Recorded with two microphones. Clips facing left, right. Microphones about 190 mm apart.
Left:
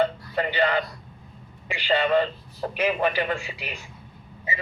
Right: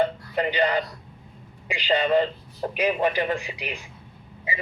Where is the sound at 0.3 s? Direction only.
15° right (ahead or behind).